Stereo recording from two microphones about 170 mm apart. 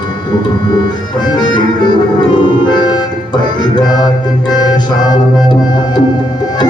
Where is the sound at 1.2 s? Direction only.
25° left (ahead or behind).